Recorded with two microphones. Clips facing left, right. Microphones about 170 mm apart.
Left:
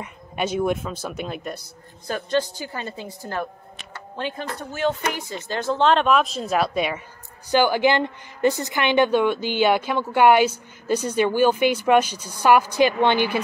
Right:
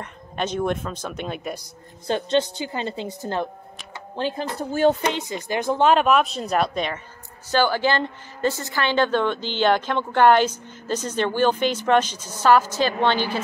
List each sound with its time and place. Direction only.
0.0 s a woman's voice: 10° left (ahead or behind)
2.0 s a woman's voice: 25° right (ahead or behind)
5.2 s a woman's voice: 15° right (ahead or behind); by 13.4 s 15° left (ahead or behind)